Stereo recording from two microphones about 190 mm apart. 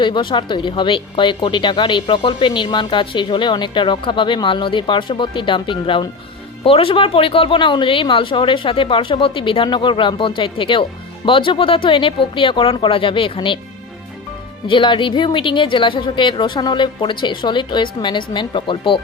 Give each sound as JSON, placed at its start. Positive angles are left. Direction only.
{"t": 0.0, "sound": "speech", "side_deg": 25}
{"t": 14.7, "sound": "speech", "side_deg": 25}